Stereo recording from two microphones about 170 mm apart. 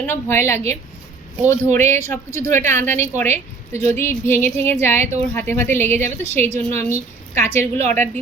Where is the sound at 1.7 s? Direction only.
15° left (ahead or behind).